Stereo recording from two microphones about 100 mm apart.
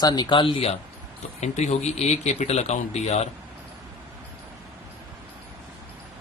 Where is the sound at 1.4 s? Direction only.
90° left.